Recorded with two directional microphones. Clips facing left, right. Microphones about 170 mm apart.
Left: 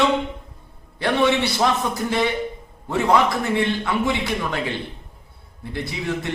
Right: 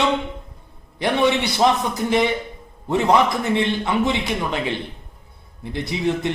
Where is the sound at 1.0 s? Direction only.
15° right (ahead or behind).